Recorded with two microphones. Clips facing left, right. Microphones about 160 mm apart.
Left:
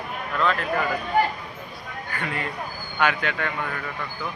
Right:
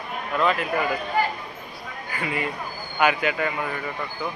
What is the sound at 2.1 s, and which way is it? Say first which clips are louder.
Speech: right 2 dB; 10° right (ahead or behind).